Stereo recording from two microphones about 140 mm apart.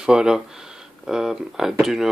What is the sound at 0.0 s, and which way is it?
Speech, 5° right (ahead or behind).